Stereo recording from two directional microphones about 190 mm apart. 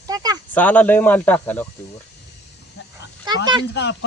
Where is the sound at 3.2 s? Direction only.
20° right (ahead or behind).